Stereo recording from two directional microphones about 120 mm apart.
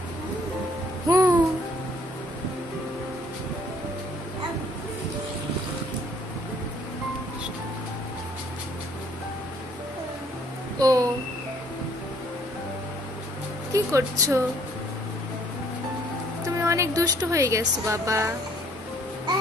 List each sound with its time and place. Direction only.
1.0 s babbling: 35° right (ahead or behind)
10.8 s a sound: 30° right (ahead or behind)
13.7 s speech: 30° right (ahead or behind)
16.5 s a woman's voice: 25° right (ahead or behind)